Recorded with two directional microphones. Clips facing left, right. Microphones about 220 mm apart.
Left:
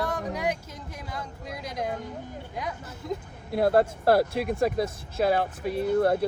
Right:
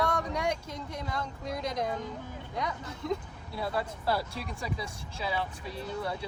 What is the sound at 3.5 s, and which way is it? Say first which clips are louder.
Speech: left 12 dB; 65° left (ahead or behind).